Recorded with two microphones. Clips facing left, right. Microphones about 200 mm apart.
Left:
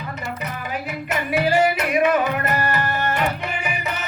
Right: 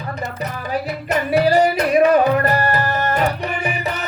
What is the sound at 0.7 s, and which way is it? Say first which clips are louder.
Music: right 6 dB; 40° right (ahead or behind).